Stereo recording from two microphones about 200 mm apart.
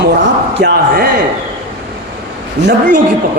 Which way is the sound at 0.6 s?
60° right (ahead or behind).